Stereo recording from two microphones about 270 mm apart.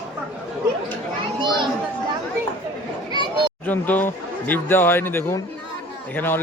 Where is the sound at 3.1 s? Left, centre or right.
Centre.